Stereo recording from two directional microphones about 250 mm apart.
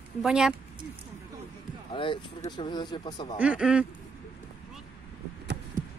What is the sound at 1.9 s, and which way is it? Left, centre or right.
Speech, centre.